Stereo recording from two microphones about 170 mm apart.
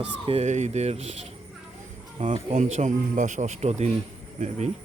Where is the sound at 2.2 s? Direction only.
45° right (ahead or behind).